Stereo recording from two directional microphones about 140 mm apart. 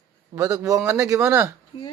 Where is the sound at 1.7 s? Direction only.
30° left (ahead or behind).